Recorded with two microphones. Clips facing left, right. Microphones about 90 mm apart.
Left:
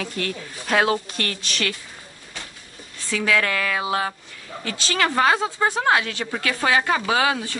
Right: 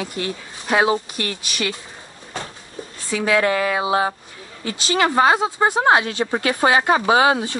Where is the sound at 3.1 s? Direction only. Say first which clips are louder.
Right 4 dB; 20° right (ahead or behind).